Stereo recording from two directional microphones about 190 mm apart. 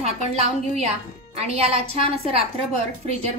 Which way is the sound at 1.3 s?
30° right (ahead or behind).